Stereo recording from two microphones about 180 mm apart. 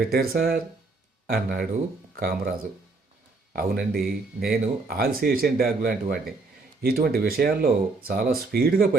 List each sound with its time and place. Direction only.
0.0 s speech: 55° right (ahead or behind)
3.5 s speech: 55° right (ahead or behind)